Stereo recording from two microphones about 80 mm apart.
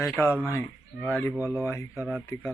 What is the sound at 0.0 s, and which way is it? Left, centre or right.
Speech, left.